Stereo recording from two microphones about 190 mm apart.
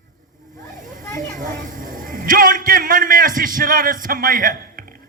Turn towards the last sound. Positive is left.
turn(degrees=-50)  # may be behind; listen again after turning